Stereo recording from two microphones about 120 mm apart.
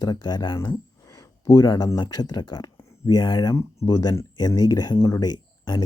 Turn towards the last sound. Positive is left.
turn(degrees=35)  # may be behind; listen again after turning